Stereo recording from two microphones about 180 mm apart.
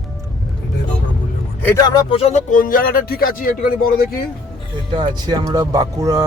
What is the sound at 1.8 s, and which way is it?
Speech, 25° left (ahead or behind).